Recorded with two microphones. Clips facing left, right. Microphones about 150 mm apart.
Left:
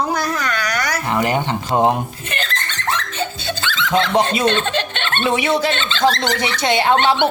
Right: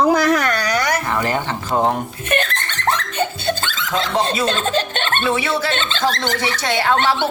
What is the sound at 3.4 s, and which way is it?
Laughter, 45° right (ahead or behind).